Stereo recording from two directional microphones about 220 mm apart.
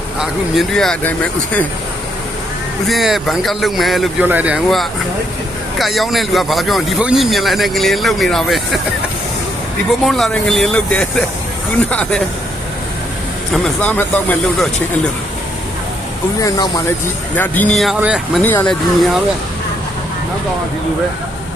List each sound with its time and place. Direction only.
0.2 s speech: centre (ahead or behind)
2.8 s speech: centre (ahead or behind)
10.1 s speech: centre (ahead or behind)
13.5 s speech: 10° left (ahead or behind)
16.4 s speech: 20° left (ahead or behind)
17.3 s speech: 10° left (ahead or behind)